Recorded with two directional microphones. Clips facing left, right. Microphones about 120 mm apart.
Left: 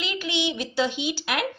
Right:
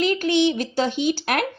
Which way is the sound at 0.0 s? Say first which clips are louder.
Right 9 dB; 45° right (ahead or behind).